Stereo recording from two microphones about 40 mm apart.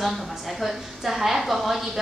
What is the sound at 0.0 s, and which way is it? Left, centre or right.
A woman's voice, centre.